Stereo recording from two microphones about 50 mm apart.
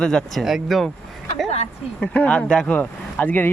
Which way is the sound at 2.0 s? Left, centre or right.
Left.